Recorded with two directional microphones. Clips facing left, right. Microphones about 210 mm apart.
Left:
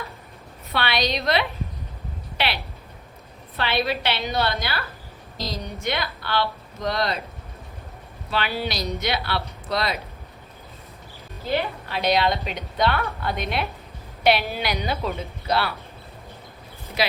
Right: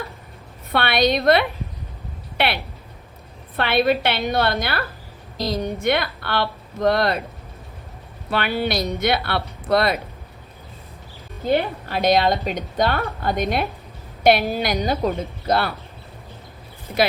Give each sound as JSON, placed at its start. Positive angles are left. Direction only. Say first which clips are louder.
{"t": 0.7, "sound": "speech", "louder": "right 6 dB", "side_deg": -55}
{"t": 3.6, "sound": "speech", "louder": "right 6 dB", "side_deg": -55}
{"t": 8.3, "sound": "speech", "louder": "right 4 dB", "side_deg": -55}
{"t": 11.4, "sound": "a woman's voice", "louder": "right 5 dB", "side_deg": -50}